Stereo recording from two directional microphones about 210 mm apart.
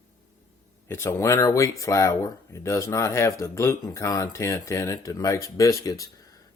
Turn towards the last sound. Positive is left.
turn(degrees=15)  # may be behind; listen again after turning